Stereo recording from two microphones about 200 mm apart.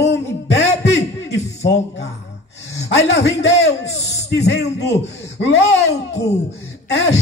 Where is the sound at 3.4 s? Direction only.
60° left (ahead or behind).